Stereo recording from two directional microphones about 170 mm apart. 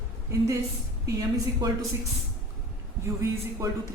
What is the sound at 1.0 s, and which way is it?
Speech, 20° right (ahead or behind).